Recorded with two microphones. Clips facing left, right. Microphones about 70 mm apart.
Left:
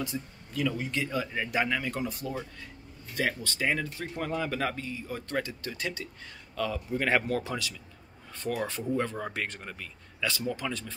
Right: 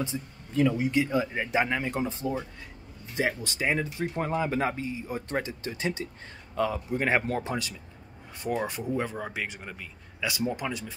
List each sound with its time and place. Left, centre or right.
0.0 s speech: right
8.4 s speech: centre